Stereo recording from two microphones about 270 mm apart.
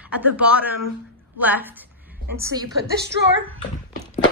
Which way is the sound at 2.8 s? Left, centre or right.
Right.